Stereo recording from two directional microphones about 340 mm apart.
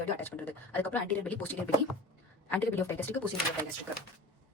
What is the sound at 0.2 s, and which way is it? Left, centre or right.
Speech, centre.